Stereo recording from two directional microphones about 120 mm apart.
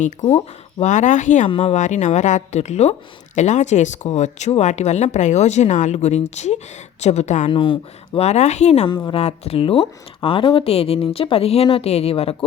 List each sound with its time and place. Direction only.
0.3 s speech: 65° left (ahead or behind); by 1.5 s 90° left
1.6 s speech: 75° left (ahead or behind)
3.3 s speech: 80° left
7.5 s speech: 45° left (ahead or behind)
8.3 s speech: 70° left (ahead or behind); by 12.5 s 55° left (ahead or behind)